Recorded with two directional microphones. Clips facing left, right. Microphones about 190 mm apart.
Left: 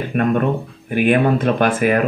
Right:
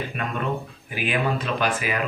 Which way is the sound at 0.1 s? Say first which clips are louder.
Left 10 dB; 50° left (ahead or behind).